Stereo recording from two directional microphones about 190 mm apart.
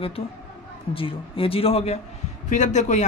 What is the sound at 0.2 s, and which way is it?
Speech, 30° left (ahead or behind).